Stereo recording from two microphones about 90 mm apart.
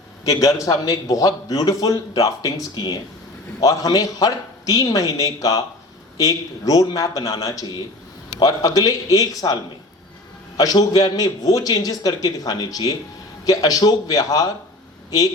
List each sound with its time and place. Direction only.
0.3 s a man's voice: 40° left (ahead or behind)
10.6 s a man's voice: 45° left (ahead or behind)